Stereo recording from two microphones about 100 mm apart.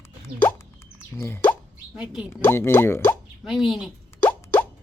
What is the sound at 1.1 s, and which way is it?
Plop, 25° left (ahead or behind).